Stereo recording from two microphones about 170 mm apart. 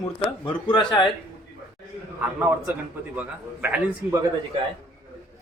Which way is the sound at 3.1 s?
10° right (ahead or behind).